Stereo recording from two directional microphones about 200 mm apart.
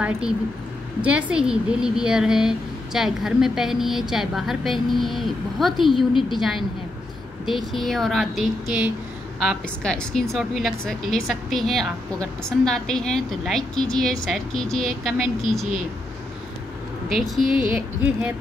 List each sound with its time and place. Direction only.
1.0 s a woman's voice: 5° right (ahead or behind)
7.4 s a woman's voice: centre (ahead or behind)
17.1 s a woman's voice: 5° right (ahead or behind)